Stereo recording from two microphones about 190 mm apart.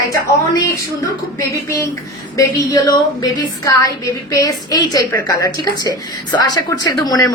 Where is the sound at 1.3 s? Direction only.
15° left (ahead or behind).